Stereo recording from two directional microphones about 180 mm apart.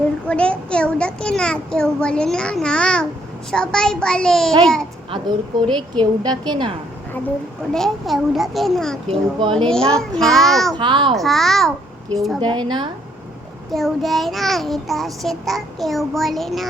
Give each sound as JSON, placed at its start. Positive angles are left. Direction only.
{"t": 0.3, "sound": "child singing", "side_deg": 5}
{"t": 5.7, "sound": "a woman's voice", "side_deg": -25}
{"t": 7.7, "sound": "child singing", "side_deg": 0}
{"t": 9.0, "sound": "a woman's voice", "side_deg": -30}
{"t": 9.6, "sound": "child singing", "side_deg": 5}
{"t": 10.8, "sound": "a woman's voice", "side_deg": -25}
{"t": 11.1, "sound": "child singing", "side_deg": 0}
{"t": 12.4, "sound": "a woman's voice", "side_deg": -25}
{"t": 13.7, "sound": "child singing", "side_deg": 0}